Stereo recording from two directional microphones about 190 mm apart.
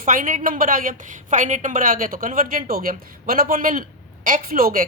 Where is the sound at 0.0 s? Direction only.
45° right (ahead or behind).